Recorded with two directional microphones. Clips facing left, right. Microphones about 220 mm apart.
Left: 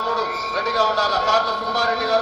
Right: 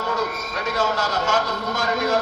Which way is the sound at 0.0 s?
40° left (ahead or behind).